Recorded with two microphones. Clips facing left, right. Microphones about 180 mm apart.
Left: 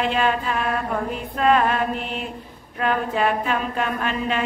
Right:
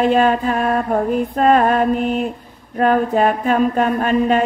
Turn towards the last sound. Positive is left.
turn(degrees=-45)  # may be behind; listen again after turning